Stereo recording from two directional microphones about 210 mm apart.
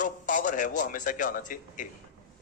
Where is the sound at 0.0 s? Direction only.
40° left (ahead or behind).